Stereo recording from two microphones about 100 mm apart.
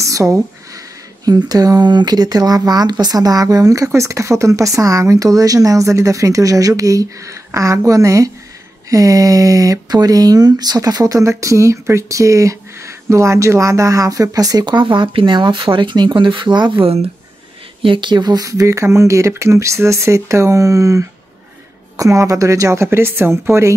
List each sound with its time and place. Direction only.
0.0 s a sound: 30° right (ahead or behind)
1.2 s speech: 40° right (ahead or behind)
16.8 s speech: 75° right (ahead or behind)
17.8 s speech: 55° right (ahead or behind); by 23.7 s 25° right (ahead or behind)